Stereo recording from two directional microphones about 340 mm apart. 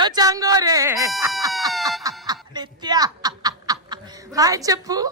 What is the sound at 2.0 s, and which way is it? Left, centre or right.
Snicker, centre.